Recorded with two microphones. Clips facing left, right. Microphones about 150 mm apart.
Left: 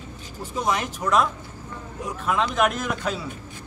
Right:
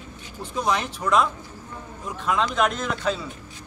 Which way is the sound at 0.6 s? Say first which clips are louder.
Right 1 dB; 5° left (ahead or behind).